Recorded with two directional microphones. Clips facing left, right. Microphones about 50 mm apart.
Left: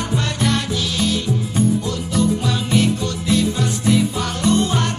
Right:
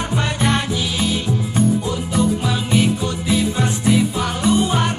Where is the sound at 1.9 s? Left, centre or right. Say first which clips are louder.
Even; centre.